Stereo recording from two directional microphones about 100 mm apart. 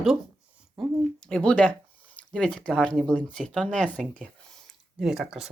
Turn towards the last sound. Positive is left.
turn(degrees=-5)  # may be behind; listen again after turning